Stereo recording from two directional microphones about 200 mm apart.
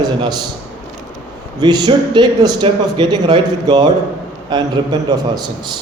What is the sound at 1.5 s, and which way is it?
A man's voice, 20° right (ahead or behind).